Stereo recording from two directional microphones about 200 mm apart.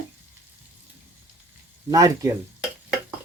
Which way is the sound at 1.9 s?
15° right (ahead or behind).